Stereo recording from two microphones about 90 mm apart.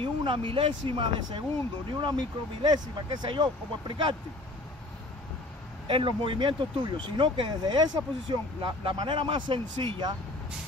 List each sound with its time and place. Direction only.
0.0 s speech: 70° right (ahead or behind)
2.1 s speech: 50° right (ahead or behind)
5.9 s speech: 70° right (ahead or behind); by 8.4 s 55° right (ahead or behind)
8.8 s speech: 70° right (ahead or behind)